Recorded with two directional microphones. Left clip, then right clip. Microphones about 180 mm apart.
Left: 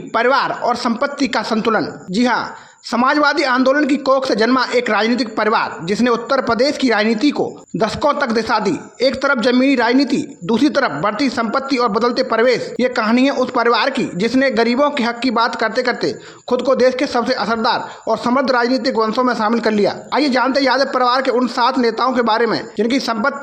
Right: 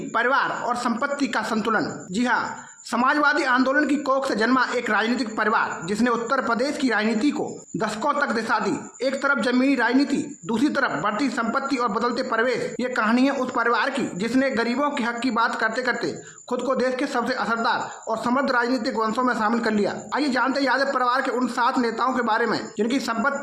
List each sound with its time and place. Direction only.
0.1 s speech: 35° left (ahead or behind)